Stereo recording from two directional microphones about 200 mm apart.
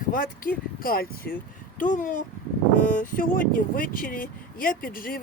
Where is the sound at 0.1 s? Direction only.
45° left (ahead or behind).